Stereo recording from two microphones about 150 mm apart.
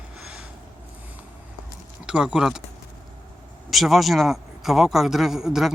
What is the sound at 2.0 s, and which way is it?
Speech, 5° right (ahead or behind).